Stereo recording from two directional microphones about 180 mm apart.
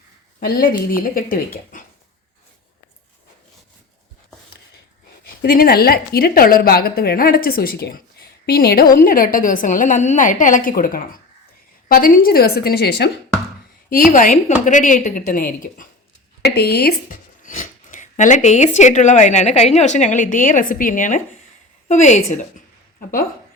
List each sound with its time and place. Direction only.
0.3 s speech: 60° left (ahead or behind)
5.2 s a woman's voice: 55° left (ahead or behind)
14.1 s speech: 45° left (ahead or behind)
16.4 s a woman's voice: 65° left (ahead or behind)
17.1 s a woman's voice: 45° left (ahead or behind)